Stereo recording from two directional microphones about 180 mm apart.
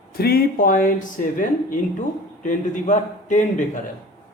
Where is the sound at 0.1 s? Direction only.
60° left (ahead or behind).